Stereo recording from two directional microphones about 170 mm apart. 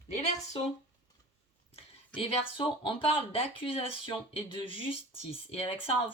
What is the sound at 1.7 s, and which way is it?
Speech, 30° left (ahead or behind).